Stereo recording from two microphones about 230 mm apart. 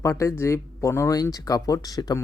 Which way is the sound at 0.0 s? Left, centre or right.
Centre.